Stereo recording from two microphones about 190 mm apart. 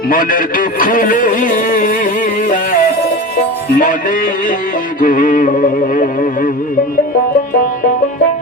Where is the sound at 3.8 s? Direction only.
45° left (ahead or behind).